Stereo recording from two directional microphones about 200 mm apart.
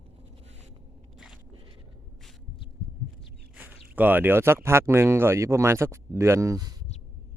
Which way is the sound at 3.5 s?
10° right (ahead or behind).